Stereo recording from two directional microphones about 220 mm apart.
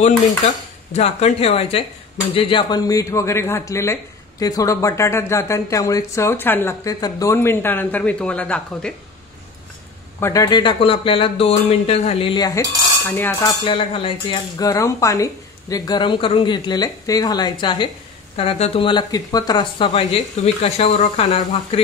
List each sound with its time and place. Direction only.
0.9 s speech: 30° left (ahead or behind); by 8.9 s 5° left (ahead or behind)
10.2 s speech: 15° left (ahead or behind)